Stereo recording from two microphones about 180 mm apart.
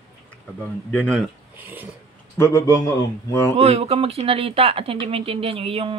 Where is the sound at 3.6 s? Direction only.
35° right (ahead or behind).